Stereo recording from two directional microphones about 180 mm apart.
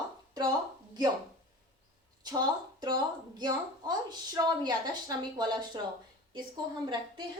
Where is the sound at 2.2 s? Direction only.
20° right (ahead or behind).